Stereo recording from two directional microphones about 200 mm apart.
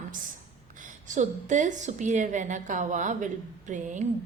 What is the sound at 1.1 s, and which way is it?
A woman's voice, 40° right (ahead or behind).